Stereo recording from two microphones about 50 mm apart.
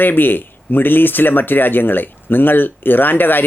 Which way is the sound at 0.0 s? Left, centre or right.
Left.